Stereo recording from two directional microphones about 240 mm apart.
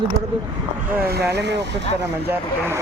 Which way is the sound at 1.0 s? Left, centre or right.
Right.